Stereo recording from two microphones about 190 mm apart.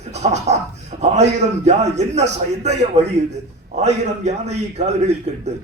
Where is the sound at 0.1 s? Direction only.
35° right (ahead or behind).